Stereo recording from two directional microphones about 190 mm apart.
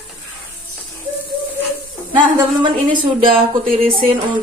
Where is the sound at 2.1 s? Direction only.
25° right (ahead or behind).